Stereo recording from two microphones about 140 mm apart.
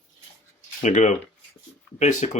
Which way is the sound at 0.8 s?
65° left (ahead or behind).